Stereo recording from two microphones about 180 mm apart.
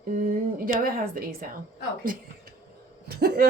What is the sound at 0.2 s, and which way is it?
A woman's voice, 50° right (ahead or behind).